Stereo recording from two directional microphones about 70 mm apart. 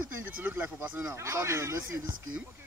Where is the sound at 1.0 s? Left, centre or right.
Right.